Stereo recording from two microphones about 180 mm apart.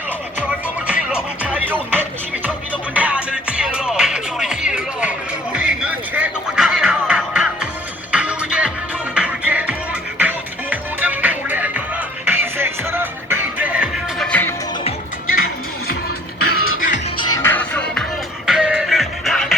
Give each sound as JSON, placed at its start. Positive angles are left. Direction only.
{"t": 0.9, "sound": "music", "side_deg": -5}
{"t": 14.3, "sound": "music", "side_deg": 10}
{"t": 16.5, "sound": "music", "side_deg": 50}
{"t": 17.2, "sound": "music", "side_deg": 20}
{"t": 18.4, "sound": "music", "side_deg": -5}